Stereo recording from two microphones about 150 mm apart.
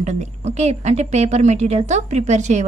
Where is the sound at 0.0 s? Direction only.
50° right (ahead or behind).